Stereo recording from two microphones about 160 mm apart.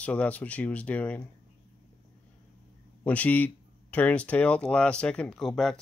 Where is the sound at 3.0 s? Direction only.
10° left (ahead or behind).